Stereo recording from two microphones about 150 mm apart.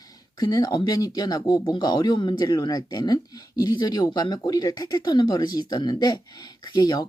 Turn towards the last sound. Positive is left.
turn(degrees=30)  # may be behind; listen again after turning